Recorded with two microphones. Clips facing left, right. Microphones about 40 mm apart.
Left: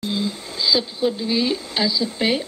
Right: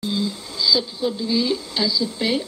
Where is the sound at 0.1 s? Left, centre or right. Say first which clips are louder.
Even; left.